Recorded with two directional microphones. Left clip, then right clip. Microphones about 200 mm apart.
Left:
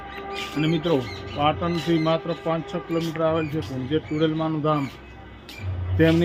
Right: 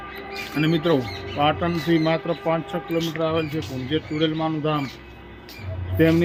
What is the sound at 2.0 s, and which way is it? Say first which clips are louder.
Speech: right 1 dB; 30° right (ahead or behind).